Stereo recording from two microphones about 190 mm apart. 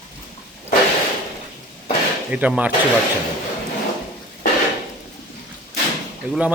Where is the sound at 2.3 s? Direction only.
5° right (ahead or behind).